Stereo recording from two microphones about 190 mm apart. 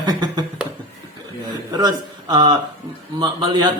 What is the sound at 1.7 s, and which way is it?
Speech, 20° right (ahead or behind).